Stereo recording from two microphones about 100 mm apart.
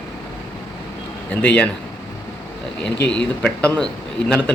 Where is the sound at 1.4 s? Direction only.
15° left (ahead or behind).